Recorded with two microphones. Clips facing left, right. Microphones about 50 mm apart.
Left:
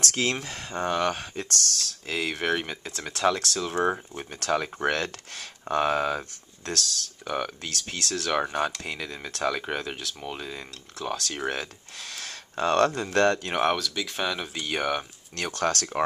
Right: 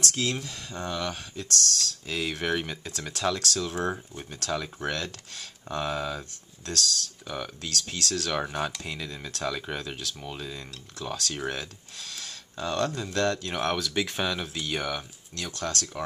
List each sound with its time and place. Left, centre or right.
0.0 s speech: left
2.0 s speech: centre
8.1 s speech: centre
11.4 s speech: centre
12.0 s speech: left
13.8 s speech: centre
14.1 s speech: centre
14.7 s speech: centre
15.3 s speech: left